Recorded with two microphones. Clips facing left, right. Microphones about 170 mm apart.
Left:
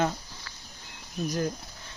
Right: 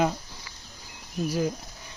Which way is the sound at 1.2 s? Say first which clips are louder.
Right 2 dB; 10° right (ahead or behind).